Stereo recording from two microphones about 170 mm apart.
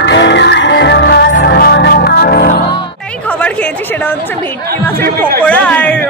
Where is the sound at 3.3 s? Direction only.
10° left (ahead or behind).